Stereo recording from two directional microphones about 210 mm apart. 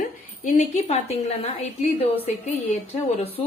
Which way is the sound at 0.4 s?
35° left (ahead or behind).